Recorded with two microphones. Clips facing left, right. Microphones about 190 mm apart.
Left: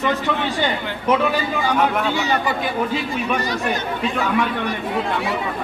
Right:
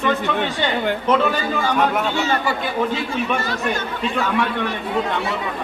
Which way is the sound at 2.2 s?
15° left (ahead or behind).